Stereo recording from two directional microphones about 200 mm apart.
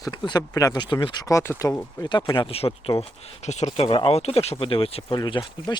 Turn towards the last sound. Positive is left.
turn(degrees=25)  # may be behind; listen again after turning